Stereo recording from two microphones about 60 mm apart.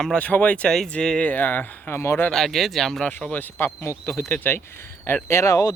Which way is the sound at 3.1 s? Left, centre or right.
Left.